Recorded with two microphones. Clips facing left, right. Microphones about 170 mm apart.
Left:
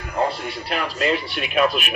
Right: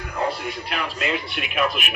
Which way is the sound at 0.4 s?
35° left (ahead or behind).